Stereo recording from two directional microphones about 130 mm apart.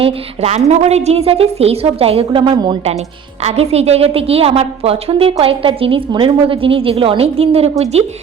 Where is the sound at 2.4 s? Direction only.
35° right (ahead or behind).